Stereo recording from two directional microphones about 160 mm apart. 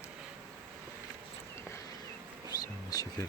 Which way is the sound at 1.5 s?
15° left (ahead or behind).